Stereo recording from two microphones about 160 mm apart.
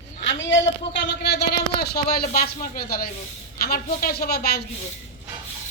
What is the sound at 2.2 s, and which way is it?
A woman's voice, 65° left (ahead or behind).